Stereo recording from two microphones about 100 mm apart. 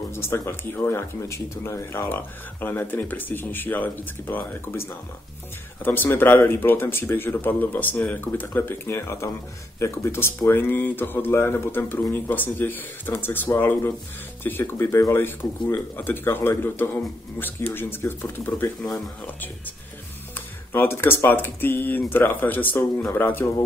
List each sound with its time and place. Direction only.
0.1 s speech: 25° left (ahead or behind)
20.3 s speech: 20° left (ahead or behind)